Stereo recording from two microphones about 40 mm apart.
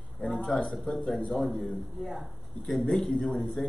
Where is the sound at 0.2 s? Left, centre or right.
Centre.